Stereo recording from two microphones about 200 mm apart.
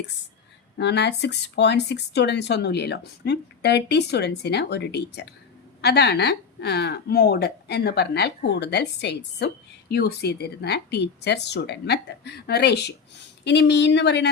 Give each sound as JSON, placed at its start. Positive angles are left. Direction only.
{"t": 0.8, "sound": "speech", "side_deg": 60}